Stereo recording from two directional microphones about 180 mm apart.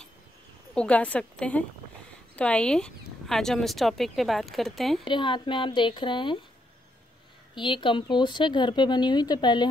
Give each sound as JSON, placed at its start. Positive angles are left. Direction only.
{"t": 0.7, "sound": "a woman's voice", "side_deg": 5}
{"t": 5.0, "sound": "speech", "side_deg": 25}
{"t": 7.5, "sound": "speech", "side_deg": 25}